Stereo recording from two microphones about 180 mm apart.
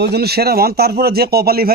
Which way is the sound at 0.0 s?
60° right (ahead or behind).